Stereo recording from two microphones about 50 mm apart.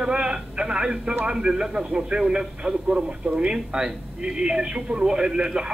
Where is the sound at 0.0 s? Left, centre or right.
Centre.